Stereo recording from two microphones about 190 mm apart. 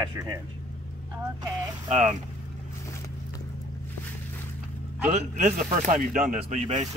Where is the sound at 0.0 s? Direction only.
20° right (ahead or behind).